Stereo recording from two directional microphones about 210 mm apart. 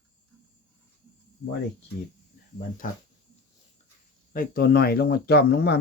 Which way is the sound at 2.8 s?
40° left (ahead or behind).